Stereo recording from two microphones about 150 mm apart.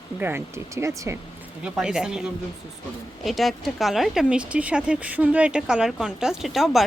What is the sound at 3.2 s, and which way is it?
Speech, centre (ahead or behind).